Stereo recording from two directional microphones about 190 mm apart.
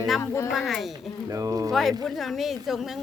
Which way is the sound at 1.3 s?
20° right (ahead or behind).